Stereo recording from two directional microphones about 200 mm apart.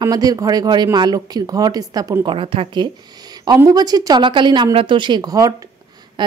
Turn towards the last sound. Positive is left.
turn(degrees=-20)  # may be behind; listen again after turning